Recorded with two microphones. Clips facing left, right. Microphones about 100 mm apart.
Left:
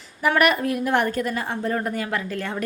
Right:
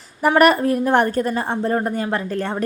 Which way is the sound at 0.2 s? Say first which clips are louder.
Right 5 dB; 35° right (ahead or behind).